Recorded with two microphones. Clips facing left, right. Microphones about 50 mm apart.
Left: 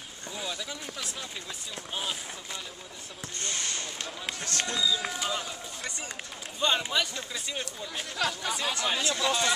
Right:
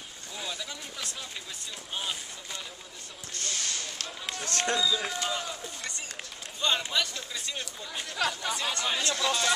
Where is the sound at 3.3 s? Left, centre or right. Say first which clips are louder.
Even; left.